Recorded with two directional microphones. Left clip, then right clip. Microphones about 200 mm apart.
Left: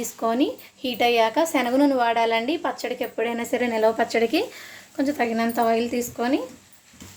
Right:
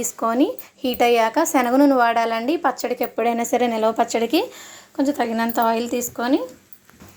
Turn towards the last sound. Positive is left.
turn(degrees=-20)  # may be behind; listen again after turning